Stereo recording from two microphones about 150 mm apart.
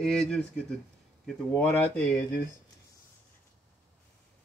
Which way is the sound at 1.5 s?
10° left (ahead or behind).